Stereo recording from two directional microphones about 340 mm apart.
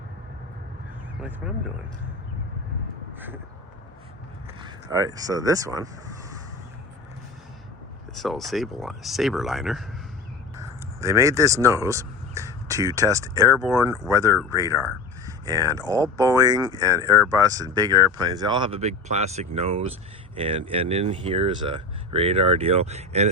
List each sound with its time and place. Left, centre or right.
1.4 s speech: centre
3.2 s crow: centre
4.6 s speech: centre
8.1 s speech: centre
11.0 s speech: centre